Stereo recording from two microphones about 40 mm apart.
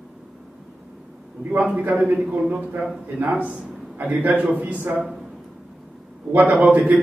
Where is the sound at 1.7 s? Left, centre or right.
Right.